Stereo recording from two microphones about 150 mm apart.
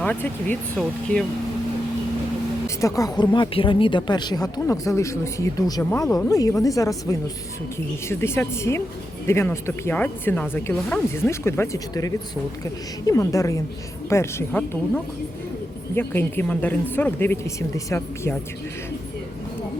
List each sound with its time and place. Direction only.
0.0 s speech: 10° left (ahead or behind)
2.6 s speech: 20° left (ahead or behind)
5.8 s speech: 15° left (ahead or behind)